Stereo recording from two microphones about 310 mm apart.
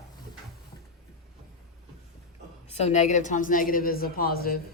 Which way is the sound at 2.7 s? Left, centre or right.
Left.